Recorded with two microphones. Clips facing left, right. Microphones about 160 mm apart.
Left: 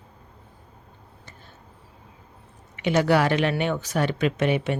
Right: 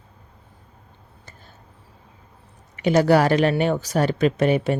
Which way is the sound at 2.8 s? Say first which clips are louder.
Right 4 dB; 40° right (ahead or behind).